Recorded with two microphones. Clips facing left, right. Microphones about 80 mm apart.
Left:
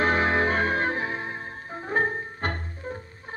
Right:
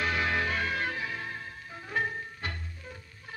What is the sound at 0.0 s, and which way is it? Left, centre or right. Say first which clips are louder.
Music: left 7 dB; left.